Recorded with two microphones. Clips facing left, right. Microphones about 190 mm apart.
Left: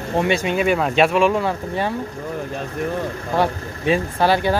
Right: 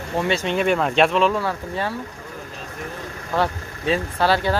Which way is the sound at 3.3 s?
15° left (ahead or behind).